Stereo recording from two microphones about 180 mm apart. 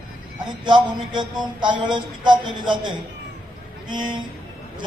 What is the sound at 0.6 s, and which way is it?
A man's voice, 25° right (ahead or behind).